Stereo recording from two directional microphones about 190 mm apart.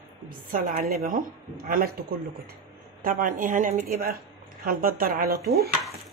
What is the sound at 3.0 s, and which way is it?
Speech, 45° right (ahead or behind).